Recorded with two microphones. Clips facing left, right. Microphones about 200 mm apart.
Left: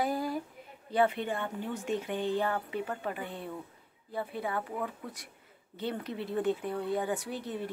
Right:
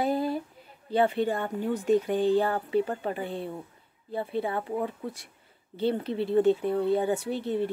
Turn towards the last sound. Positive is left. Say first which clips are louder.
# right 8 dB
turn(degrees=-30)  # may be behind; listen again after turning